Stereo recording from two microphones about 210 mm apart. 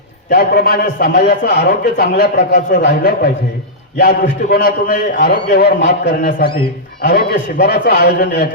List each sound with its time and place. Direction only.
0.3 s a man's voice: 50° left (ahead or behind)